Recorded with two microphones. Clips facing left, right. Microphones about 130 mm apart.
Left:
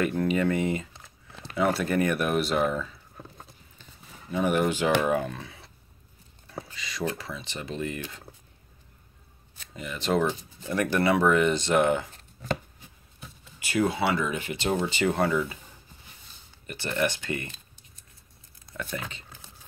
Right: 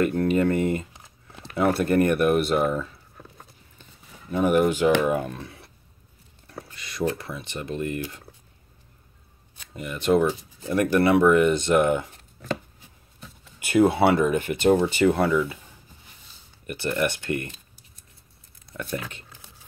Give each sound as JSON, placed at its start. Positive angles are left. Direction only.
{"t": 0.0, "sound": "speech", "side_deg": -45}
{"t": 0.9, "sound": "a sound", "side_deg": -15}
{"t": 1.6, "sound": "speech", "side_deg": -55}
{"t": 4.3, "sound": "speech", "side_deg": -45}
{"t": 6.8, "sound": "a sound", "side_deg": -55}
{"t": 7.2, "sound": "speech", "side_deg": -55}
{"t": 9.8, "sound": "speech", "side_deg": -55}
{"t": 10.2, "sound": "speech", "side_deg": -40}
{"t": 10.8, "sound": "speech", "side_deg": -60}
{"t": 13.6, "sound": "speech", "side_deg": -55}
{"t": 16.6, "sound": "speech", "side_deg": -55}
{"t": 18.8, "sound": "speech", "side_deg": -60}